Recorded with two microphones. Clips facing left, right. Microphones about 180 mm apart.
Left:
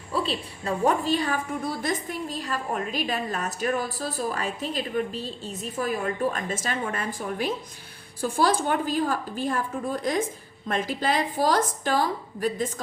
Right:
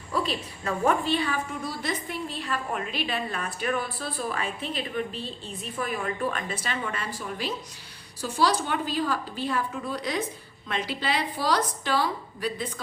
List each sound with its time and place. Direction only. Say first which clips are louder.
0.1 s a woman's voice: left 1 dB; 30° left (ahead or behind)